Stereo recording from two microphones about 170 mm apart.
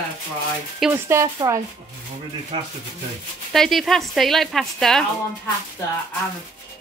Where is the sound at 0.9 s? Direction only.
15° right (ahead or behind).